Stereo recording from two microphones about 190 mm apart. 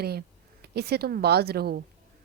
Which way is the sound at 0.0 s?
55° right (ahead or behind).